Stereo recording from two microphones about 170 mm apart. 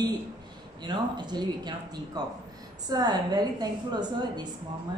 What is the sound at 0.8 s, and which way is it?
A woman's voice, 25° right (ahead or behind).